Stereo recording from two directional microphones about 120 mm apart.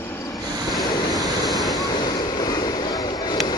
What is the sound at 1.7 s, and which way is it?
Vehicle, 35° left (ahead or behind).